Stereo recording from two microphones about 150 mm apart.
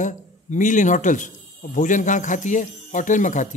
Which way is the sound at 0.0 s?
55° left (ahead or behind).